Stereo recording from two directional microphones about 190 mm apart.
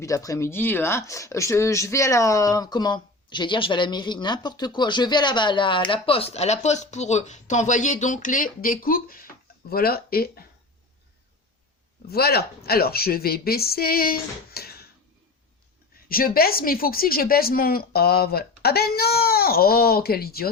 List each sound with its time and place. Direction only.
0.0 s speech: 15° left (ahead or behind); by 10.4 s 55° left (ahead or behind)
12.0 s a woman's voice: 55° left (ahead or behind)
16.0 s speech: 50° left (ahead or behind)